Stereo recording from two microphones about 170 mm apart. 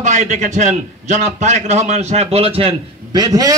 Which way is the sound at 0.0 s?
45° right (ahead or behind).